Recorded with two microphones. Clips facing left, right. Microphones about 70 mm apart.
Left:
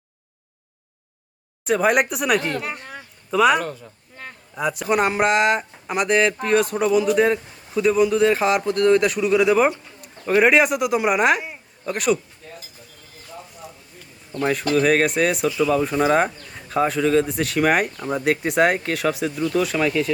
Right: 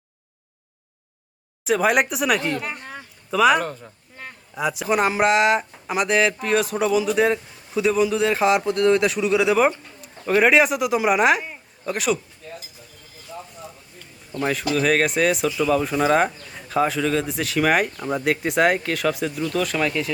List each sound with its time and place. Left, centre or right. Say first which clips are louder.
1.6 s speech: left 1 dB; centre
3.6 s speech: even; right
4.2 s speech: even; centre
14.3 s speech: left 2 dB; centre